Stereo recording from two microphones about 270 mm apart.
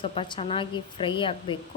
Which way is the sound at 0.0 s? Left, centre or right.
Centre.